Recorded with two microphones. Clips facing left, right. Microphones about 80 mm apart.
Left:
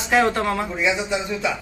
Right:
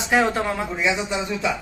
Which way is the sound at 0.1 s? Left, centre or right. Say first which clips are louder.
Left 2 dB; centre.